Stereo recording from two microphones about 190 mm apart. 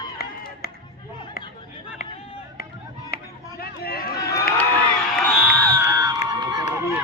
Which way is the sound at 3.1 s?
50° left (ahead or behind).